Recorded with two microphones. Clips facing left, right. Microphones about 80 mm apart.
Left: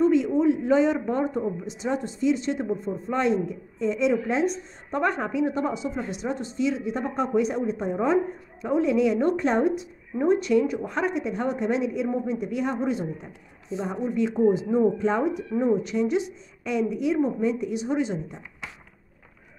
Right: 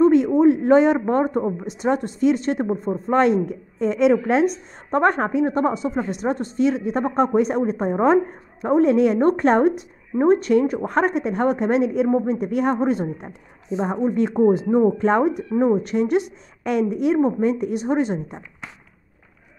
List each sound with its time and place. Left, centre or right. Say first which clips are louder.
0.0 s a woman's voice: right 6 dB; right